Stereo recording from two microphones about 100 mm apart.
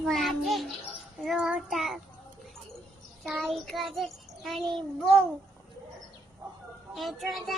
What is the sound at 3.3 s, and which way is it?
Child singing, centre (ahead or behind).